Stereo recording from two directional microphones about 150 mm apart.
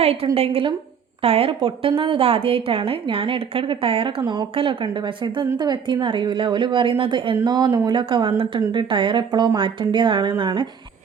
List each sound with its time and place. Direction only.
0.0 s a woman's voice: 40° right (ahead or behind)